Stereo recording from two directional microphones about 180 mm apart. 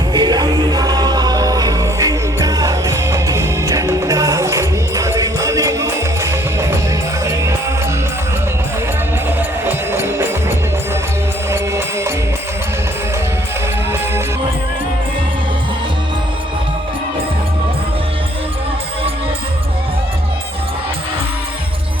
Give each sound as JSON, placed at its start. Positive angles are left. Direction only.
{"t": 0.1, "sound": "music", "side_deg": -25}
{"t": 9.6, "sound": "music", "side_deg": -10}
{"t": 11.5, "sound": "music", "side_deg": -15}